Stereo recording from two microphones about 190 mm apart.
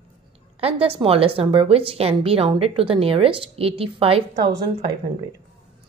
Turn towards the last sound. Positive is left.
turn(degrees=-30)  # may be behind; listen again after turning